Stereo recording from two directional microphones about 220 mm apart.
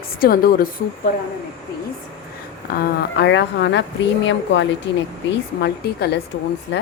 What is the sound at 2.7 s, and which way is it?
Speech, 45° left (ahead or behind).